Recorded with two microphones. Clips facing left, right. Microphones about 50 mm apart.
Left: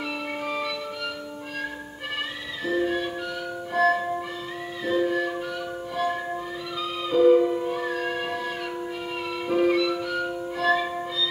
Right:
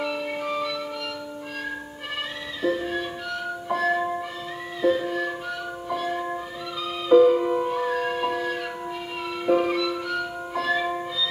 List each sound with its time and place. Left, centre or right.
0.0 s music: centre
2.6 s music: centre
7.4 s music: centre
7.7 s music: centre